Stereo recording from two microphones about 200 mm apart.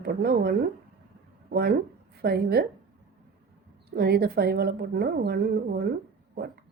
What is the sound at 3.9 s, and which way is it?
A woman's voice, 50° right (ahead or behind).